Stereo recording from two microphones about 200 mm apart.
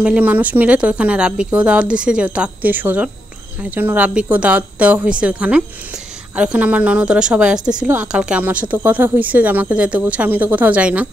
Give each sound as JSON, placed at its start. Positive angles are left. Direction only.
{"t": 0.0, "sound": "a woman's voice", "side_deg": -5}